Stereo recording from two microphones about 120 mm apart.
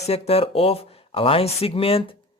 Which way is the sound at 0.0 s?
60° left (ahead or behind).